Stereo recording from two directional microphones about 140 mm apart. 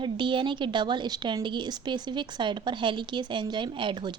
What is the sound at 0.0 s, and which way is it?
Speech, 35° right (ahead or behind).